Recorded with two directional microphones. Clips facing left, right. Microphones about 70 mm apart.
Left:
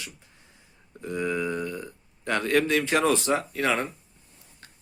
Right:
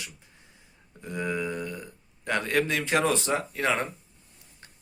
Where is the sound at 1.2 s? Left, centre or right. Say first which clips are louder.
Left 2 dB; centre.